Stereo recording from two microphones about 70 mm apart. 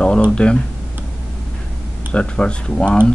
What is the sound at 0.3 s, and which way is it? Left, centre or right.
Speech, centre.